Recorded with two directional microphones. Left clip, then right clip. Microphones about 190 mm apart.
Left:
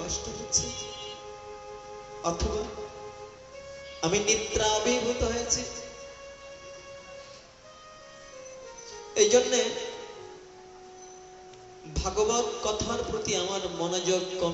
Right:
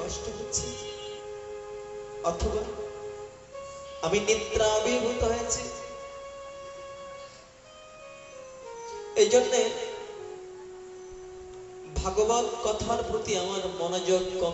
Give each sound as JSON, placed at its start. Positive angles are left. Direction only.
{"t": 0.0, "sound": "music", "side_deg": 25}
{"t": 2.3, "sound": "a man's voice", "side_deg": 25}
{"t": 4.0, "sound": "a man's voice", "side_deg": 25}
{"t": 9.1, "sound": "a man's voice", "side_deg": 25}
{"t": 11.9, "sound": "a man's voice", "side_deg": 25}